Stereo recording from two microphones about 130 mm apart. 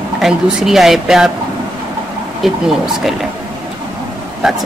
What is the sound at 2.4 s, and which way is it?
Speech, centre (ahead or behind).